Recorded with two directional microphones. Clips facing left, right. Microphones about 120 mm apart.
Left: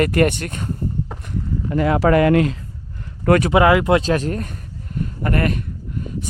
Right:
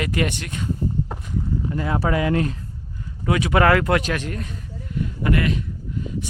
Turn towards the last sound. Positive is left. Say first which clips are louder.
# left 1 dB
turn(degrees=55)  # may be behind; listen again after turning